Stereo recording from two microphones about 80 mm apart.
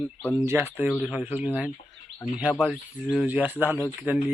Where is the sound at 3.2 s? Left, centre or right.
Right.